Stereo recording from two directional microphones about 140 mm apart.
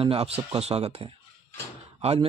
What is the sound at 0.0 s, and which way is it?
Speech, 45° right (ahead or behind).